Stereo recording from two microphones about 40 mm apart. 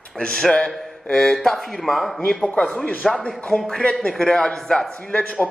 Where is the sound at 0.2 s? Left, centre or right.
Left.